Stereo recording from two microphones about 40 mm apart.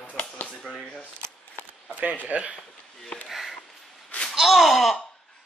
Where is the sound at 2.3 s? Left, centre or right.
Right.